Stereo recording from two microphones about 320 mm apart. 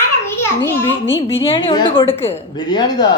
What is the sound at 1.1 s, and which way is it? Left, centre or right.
Speech, centre.